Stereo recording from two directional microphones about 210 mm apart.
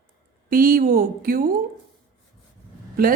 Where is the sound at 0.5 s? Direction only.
45° right (ahead or behind).